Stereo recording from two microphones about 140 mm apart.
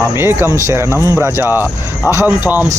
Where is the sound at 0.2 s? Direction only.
15° right (ahead or behind).